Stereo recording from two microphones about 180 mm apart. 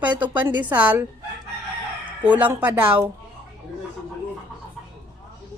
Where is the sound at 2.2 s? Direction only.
10° right (ahead or behind).